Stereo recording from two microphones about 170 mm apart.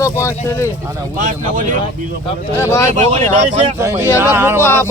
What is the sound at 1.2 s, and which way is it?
Speech, 50° right (ahead or behind).